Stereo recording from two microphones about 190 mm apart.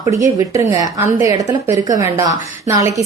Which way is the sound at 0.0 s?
15° right (ahead or behind).